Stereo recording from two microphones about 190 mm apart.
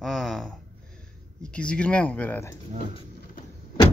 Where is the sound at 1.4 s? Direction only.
5° left (ahead or behind).